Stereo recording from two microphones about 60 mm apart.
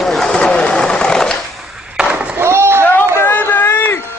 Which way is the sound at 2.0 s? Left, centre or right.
Centre.